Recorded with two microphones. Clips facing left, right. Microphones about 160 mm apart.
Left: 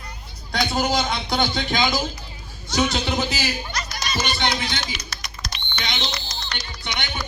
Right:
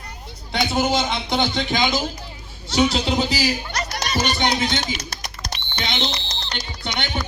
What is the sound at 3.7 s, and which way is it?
Music, 70° right (ahead or behind).